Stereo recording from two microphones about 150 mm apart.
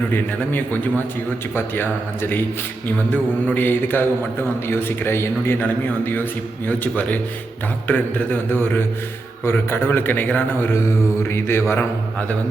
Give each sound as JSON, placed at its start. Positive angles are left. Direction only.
{"t": 0.1, "sound": "a man's voice", "side_deg": 15}